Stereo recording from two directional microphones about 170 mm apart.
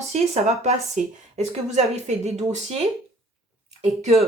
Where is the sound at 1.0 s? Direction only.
5° right (ahead or behind).